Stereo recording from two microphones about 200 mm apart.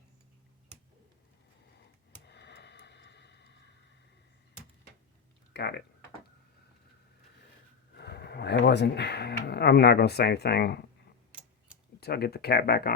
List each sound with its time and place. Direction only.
2.2 s tick-tock: 60° left (ahead or behind)
5.5 s typing: 55° left (ahead or behind)
7.9 s a sound: 55° left (ahead or behind)
11.3 s tick-tock: 5° right (ahead or behind)
11.9 s speech: 55° left (ahead or behind)